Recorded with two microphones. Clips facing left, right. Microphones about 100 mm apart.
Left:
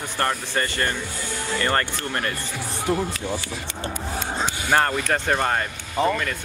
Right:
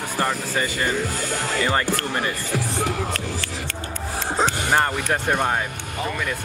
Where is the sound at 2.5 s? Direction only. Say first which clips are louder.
Left 1 dB; 80° right.